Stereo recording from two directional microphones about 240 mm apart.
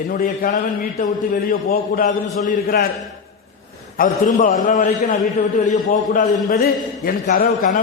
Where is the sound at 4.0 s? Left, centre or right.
Left.